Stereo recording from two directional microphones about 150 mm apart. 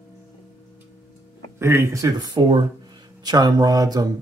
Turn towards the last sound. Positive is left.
turn(degrees=-25)  # may be behind; listen again after turning